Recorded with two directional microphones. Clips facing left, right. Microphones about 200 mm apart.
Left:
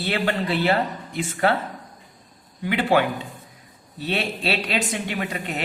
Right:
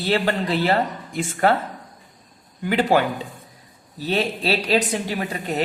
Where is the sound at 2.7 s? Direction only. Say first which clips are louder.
Right 2 dB; 40° right (ahead or behind).